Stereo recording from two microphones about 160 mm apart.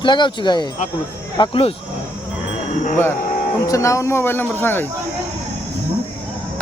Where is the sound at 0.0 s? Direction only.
30° left (ahead or behind).